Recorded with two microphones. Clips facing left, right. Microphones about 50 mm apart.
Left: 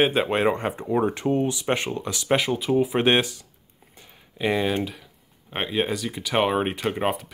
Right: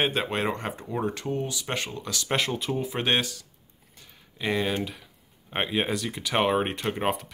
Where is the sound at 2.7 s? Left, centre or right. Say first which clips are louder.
Left 7 dB; centre.